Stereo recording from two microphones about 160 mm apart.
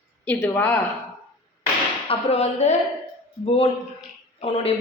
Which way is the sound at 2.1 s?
40° left (ahead or behind).